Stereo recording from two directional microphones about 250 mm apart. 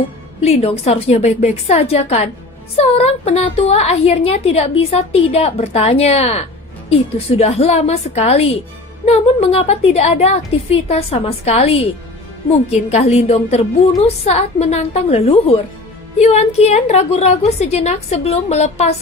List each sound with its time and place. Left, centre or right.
0.4 s a woman's voice: left